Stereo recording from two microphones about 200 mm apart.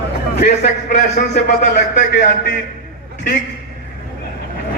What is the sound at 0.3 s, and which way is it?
Speech, 40° left (ahead or behind).